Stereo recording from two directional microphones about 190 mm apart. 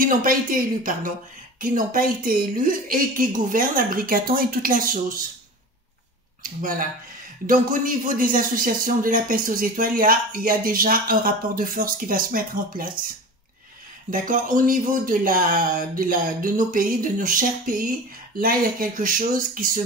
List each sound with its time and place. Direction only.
0.0 s speech: 45° right (ahead or behind)
7.4 s speech: 45° right (ahead or behind)
14.1 s speech: 45° right (ahead or behind)